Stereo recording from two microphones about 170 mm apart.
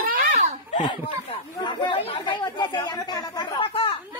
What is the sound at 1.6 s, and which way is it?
Chatter, 25° left (ahead or behind).